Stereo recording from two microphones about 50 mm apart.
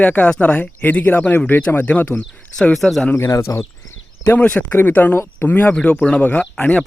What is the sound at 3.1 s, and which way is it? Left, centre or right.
Speech, left.